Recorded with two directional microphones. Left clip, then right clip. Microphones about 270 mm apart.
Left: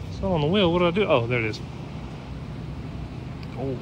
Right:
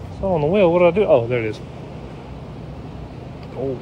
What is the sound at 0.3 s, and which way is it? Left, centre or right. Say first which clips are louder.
Speech: right 6 dB; centre.